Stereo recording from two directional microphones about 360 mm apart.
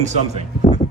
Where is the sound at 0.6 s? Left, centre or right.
Centre.